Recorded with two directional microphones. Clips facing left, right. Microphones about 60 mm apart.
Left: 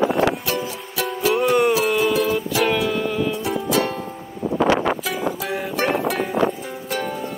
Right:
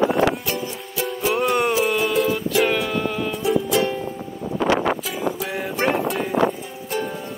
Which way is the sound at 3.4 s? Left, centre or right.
Left.